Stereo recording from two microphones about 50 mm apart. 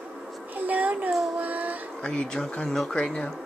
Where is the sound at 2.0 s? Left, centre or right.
Left.